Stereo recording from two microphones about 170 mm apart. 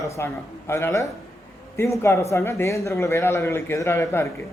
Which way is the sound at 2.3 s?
15° left (ahead or behind).